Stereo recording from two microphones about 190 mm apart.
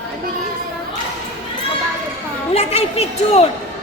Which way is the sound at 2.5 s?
35° left (ahead or behind).